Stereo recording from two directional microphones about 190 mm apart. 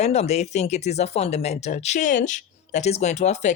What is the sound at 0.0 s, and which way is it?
Speech, 35° left (ahead or behind).